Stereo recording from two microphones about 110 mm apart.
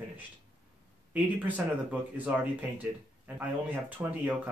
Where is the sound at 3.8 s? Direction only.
15° right (ahead or behind).